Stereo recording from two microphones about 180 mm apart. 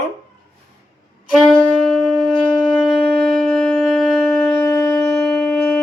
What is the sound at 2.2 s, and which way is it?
Wind instrument, 5° left (ahead or behind).